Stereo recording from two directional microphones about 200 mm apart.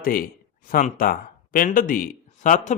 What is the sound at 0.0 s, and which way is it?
A man's voice, 45° left (ahead or behind).